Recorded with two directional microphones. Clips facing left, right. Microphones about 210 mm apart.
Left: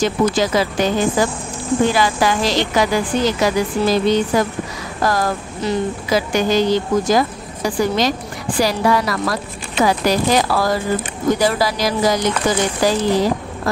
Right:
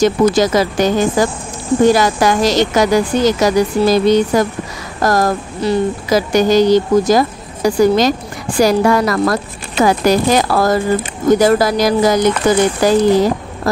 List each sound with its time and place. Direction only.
0.0 s a woman's voice: 45° right (ahead or behind)